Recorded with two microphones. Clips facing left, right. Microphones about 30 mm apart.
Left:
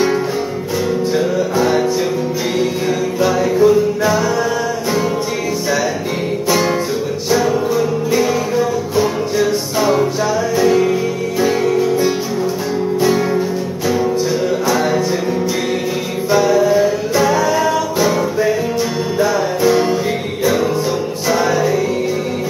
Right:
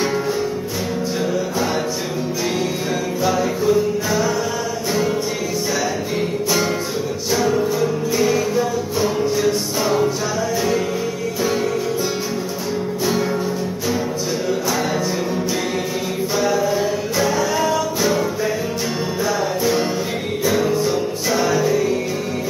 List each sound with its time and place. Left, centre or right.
3.3 s music: centre
7.2 s music: centre
11.4 s music: centre
14.7 s music: centre
16.6 s music: centre